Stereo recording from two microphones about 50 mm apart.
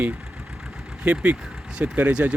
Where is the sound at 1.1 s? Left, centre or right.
Right.